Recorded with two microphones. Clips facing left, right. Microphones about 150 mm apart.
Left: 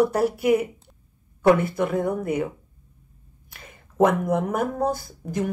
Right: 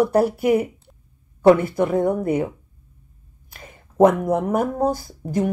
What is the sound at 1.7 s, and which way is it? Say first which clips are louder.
Speech: right 4 dB; 25° right (ahead or behind).